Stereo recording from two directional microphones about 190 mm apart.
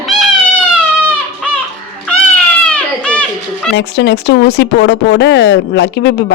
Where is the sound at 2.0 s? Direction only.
5° left (ahead or behind).